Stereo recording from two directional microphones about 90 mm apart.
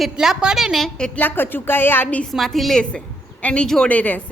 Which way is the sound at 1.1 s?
20° left (ahead or behind).